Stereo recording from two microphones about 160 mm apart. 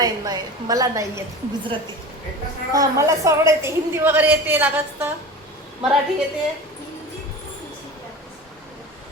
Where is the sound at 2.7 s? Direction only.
20° right (ahead or behind).